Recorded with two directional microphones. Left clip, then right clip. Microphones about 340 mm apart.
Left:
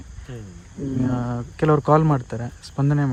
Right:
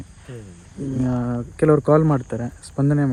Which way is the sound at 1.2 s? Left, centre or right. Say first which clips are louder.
Right 6 dB; right.